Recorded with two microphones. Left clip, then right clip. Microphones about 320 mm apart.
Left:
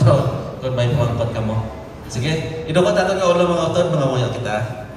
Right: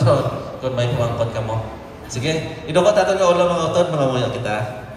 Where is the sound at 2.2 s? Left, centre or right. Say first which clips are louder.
Even; centre.